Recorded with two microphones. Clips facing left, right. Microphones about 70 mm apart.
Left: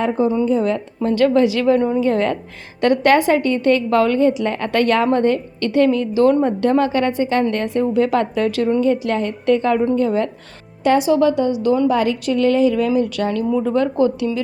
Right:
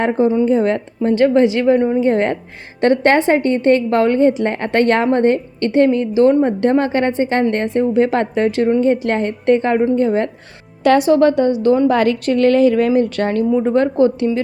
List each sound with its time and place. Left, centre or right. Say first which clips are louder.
0.0 s a woman's voice: right 3 dB; right
1.1 s a woman's voice: right 2 dB; right
10.8 s a woman's voice: right 3 dB; right
11.9 s a woman's voice: right 3 dB; right
13.5 s a woman's voice: right 3 dB; right